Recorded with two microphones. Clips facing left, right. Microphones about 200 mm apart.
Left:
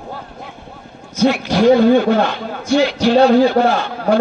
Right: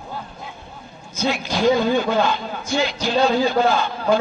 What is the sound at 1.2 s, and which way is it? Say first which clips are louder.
A man's voice: left 7 dB; 65° left (ahead or behind).